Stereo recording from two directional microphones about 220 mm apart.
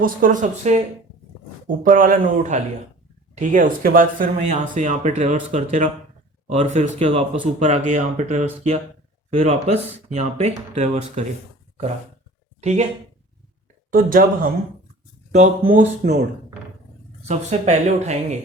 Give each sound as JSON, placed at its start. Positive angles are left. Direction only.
{"t": 0.0, "sound": "speech", "side_deg": -35}
{"t": 12.5, "sound": "speech", "side_deg": -30}
{"t": 13.9, "sound": "speech", "side_deg": -40}
{"t": 17.2, "sound": "speech", "side_deg": -30}